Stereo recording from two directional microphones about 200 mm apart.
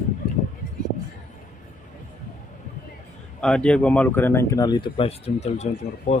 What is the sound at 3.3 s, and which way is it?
Speech, 5° left (ahead or behind).